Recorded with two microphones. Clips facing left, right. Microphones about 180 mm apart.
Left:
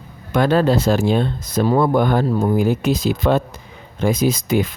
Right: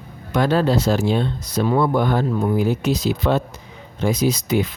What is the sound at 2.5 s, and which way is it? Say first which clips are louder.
Speech: left 2 dB; 50° left (ahead or behind).